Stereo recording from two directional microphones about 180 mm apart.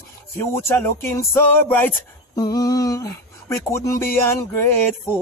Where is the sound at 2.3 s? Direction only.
20° left (ahead or behind).